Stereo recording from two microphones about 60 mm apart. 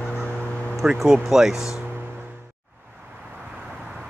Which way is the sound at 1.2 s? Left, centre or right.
Centre.